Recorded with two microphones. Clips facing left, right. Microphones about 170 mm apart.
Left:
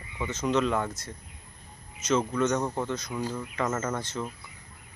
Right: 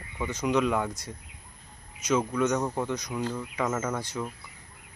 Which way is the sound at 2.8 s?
15° right (ahead or behind).